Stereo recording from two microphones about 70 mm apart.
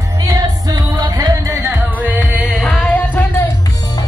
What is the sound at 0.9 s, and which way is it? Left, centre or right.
Music, right.